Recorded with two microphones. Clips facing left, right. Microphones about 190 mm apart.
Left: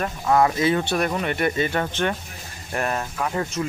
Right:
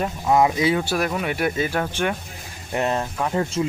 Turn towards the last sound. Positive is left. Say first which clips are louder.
# right 3 dB
turn(degrees=-25)  # may be behind; listen again after turning